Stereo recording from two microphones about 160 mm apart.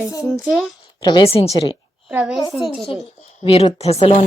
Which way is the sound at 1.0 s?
30° left (ahead or behind).